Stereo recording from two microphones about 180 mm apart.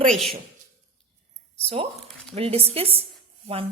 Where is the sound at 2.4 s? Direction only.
35° right (ahead or behind).